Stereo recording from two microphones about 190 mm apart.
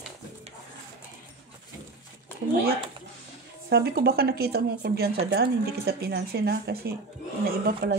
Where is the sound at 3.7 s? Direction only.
55° right (ahead or behind).